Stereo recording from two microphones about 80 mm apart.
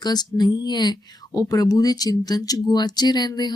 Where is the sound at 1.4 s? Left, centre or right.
Left.